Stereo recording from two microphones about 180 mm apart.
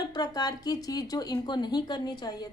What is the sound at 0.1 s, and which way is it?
Speech, 20° left (ahead or behind).